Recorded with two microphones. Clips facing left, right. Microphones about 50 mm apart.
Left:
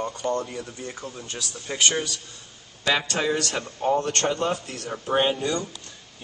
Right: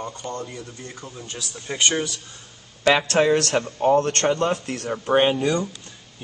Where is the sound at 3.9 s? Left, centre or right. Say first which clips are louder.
Right 4 dB; right.